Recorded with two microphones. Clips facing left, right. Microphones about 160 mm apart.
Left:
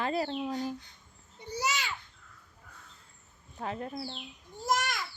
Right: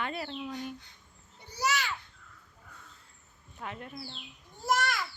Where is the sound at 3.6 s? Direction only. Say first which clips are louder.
Left 5 dB; 35° left (ahead or behind).